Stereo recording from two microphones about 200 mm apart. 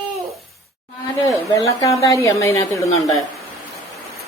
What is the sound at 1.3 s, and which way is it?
A woman's voice, 15° left (ahead or behind).